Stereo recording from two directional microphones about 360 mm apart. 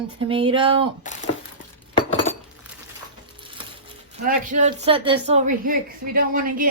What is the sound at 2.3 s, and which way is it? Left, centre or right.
Chink, centre.